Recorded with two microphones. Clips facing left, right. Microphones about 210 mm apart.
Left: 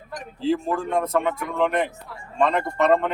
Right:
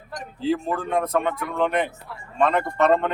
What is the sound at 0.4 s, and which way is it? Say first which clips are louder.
Speech: left 1 dB; centre (ahead or behind).